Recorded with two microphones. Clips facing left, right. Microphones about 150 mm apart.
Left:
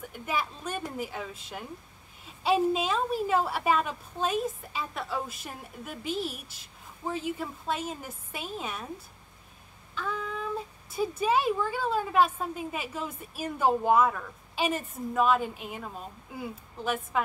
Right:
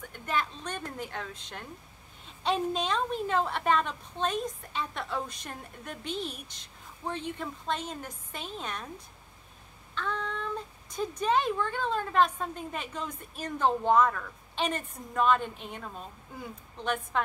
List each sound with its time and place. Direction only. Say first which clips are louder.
0.0 s a woman's voice: even; 10° left (ahead or behind)